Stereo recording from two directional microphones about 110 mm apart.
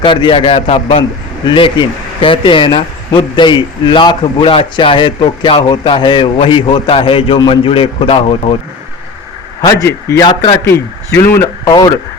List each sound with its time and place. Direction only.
0.0 s speech: 45° left (ahead or behind)
1.5 s speech: 50° left (ahead or behind)
10.1 s a man's voice: 35° left (ahead or behind)